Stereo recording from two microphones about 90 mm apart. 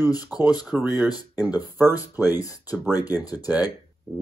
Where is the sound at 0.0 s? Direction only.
45° left (ahead or behind).